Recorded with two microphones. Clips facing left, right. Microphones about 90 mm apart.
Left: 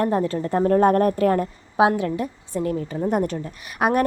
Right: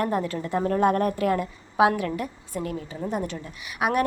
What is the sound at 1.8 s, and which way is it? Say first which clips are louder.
A woman's voice: left 2 dB; 30° left (ahead or behind).